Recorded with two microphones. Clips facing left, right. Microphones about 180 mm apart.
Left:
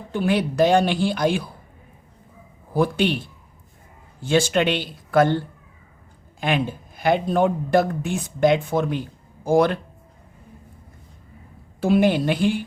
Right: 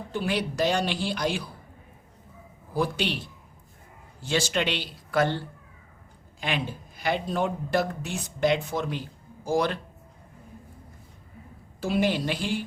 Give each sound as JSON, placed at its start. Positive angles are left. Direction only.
{"t": 0.1, "sound": "a woman's voice", "side_deg": 55}
{"t": 2.7, "sound": "a woman's voice", "side_deg": 55}
{"t": 4.2, "sound": "a woman's voice", "side_deg": 55}
{"t": 6.4, "sound": "a woman's voice", "side_deg": 50}
{"t": 11.8, "sound": "a woman's voice", "side_deg": 55}